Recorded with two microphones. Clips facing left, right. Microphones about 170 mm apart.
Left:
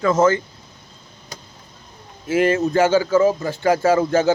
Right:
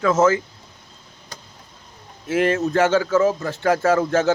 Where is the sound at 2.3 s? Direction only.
Centre (ahead or behind).